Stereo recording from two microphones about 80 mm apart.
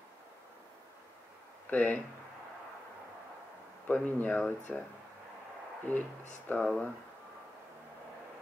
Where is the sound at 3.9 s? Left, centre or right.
Centre.